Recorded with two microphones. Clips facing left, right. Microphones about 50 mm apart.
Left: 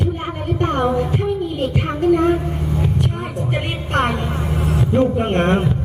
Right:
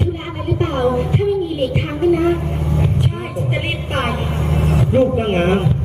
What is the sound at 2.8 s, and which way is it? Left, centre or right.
Music, centre.